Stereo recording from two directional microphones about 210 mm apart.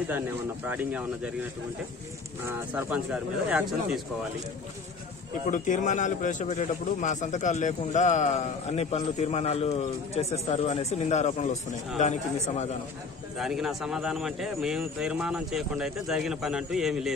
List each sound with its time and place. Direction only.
0.7 s speech: 5° right (ahead or behind)
2.4 s speech: 10° right (ahead or behind)
5.5 s a man's voice: 35° left (ahead or behind)
13.4 s speech: centre (ahead or behind)